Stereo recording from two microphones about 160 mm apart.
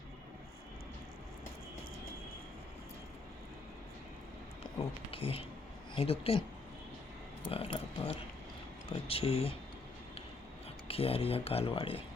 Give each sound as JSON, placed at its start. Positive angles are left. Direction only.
{"t": 4.8, "sound": "speech", "side_deg": 35}
{"t": 7.4, "sound": "speech", "side_deg": 35}
{"t": 10.8, "sound": "speech", "side_deg": 35}